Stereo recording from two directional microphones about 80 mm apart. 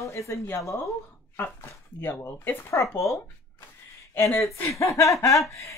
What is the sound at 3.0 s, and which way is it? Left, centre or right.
Speech, left.